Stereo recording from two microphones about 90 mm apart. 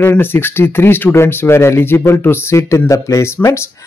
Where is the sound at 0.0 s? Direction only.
20° left (ahead or behind).